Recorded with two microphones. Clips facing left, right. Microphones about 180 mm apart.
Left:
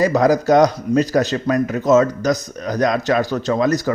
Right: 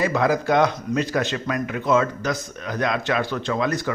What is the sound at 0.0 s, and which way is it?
Speech, 40° left (ahead or behind).